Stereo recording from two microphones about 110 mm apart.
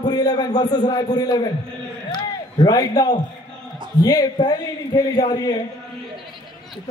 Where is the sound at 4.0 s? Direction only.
35° left (ahead or behind).